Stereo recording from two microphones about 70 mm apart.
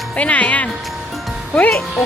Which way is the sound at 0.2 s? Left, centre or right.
Centre.